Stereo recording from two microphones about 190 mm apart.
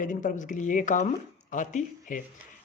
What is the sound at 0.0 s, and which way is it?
Speech, 45° left (ahead or behind).